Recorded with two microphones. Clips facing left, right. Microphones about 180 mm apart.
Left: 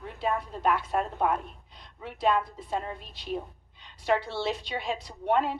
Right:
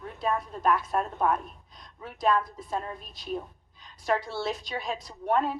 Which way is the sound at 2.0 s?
25° left (ahead or behind).